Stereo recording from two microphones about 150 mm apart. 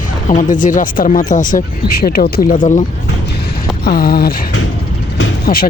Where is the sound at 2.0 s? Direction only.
90° left; by 2.9 s 60° left (ahead or behind).